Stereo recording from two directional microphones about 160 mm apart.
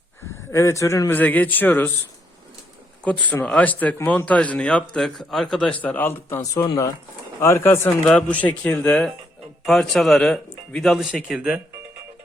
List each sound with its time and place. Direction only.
0.5 s speech: 20° left (ahead or behind)
3.0 s speech: 10° left (ahead or behind)